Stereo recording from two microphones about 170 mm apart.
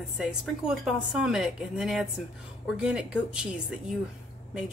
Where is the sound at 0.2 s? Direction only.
5° right (ahead or behind).